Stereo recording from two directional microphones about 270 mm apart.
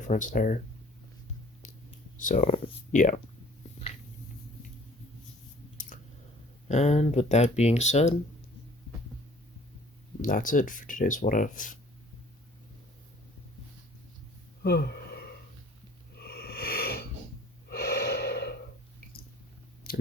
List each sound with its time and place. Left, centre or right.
0.1 s speech: left
2.1 s speech: left
5.8 s chewing: left
6.7 s speech: left
10.2 s speech: left
14.6 s a sound: left
16.1 s snort: left
17.7 s gasp: left
19.9 s a sound: left